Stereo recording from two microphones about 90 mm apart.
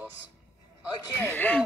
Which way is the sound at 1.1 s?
20° left (ahead or behind).